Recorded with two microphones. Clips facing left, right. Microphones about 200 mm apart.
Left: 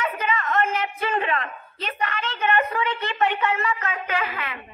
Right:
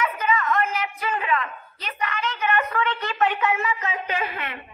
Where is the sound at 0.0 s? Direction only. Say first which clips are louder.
Right 2 dB; 30° left (ahead or behind).